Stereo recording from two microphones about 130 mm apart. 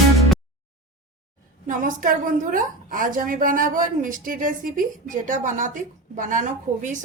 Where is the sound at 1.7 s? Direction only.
90° right.